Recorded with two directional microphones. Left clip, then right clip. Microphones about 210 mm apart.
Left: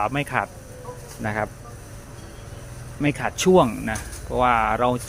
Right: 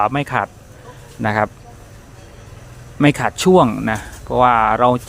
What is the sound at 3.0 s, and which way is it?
Speech, 30° right (ahead or behind).